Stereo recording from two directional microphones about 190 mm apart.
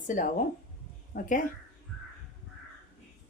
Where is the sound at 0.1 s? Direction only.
40° left (ahead or behind).